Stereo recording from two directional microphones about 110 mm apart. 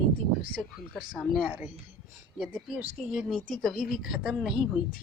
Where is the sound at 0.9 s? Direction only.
Centre (ahead or behind).